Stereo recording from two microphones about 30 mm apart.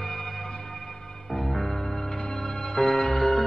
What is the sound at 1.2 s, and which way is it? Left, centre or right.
Music, centre.